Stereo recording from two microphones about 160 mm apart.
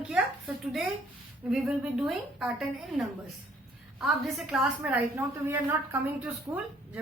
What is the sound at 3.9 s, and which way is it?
A woman's voice, centre (ahead or behind).